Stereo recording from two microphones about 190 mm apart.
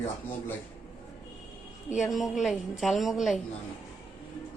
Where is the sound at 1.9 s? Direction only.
Centre (ahead or behind).